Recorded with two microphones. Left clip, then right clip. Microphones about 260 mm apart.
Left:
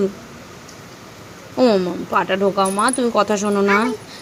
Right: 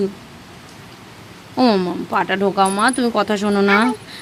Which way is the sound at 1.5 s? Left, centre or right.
Right.